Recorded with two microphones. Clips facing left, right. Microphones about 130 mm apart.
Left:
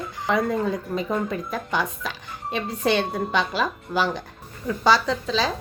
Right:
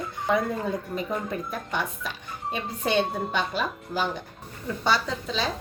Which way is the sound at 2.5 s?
80° left.